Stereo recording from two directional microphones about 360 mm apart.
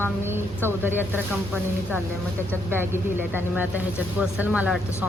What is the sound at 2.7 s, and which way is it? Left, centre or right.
Speech, centre.